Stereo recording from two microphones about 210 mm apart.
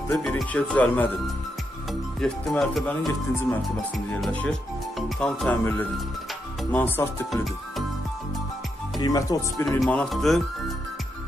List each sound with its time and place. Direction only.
0.2 s speech: 5° left (ahead or behind)
2.1 s speech: 5° left (ahead or behind)
8.9 s speech: 20° left (ahead or behind)
9.8 s speech: 5° left (ahead or behind)